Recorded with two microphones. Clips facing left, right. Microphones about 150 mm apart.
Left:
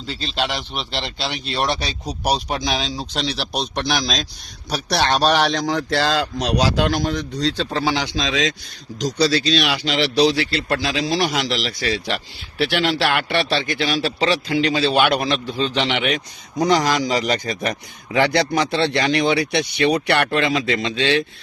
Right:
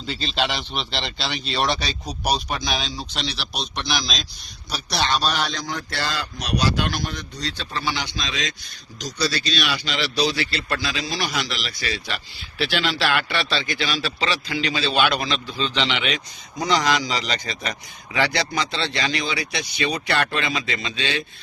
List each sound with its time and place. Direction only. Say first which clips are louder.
0.1 s a man's voice: left 1 dB; 5° left (ahead or behind); by 3.9 s 45° left (ahead or behind)
4.7 s a man's voice: left 4 dB; 65° left (ahead or behind)
10.7 s a man's voice: left 6 dB; 65° left (ahead or behind)